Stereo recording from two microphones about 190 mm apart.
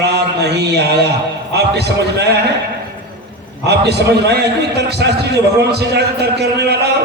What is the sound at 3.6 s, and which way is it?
A man's voice, 60° right (ahead or behind).